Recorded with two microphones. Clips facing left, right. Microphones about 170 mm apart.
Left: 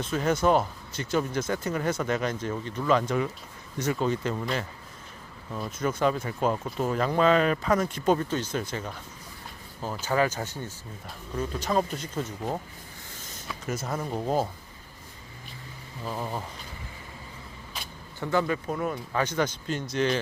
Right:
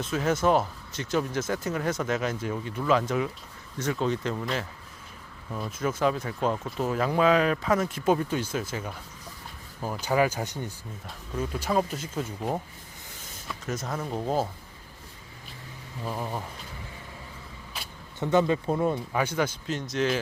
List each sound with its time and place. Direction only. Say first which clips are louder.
0.0 s speech: even; centre (ahead or behind)
13.5 s speech: left 1 dB; 5° left (ahead or behind)
16.0 s speech: even; 5° right (ahead or behind)
18.2 s speech: right 3 dB; 20° right (ahead or behind)
19.1 s speech: even; 10° right (ahead or behind)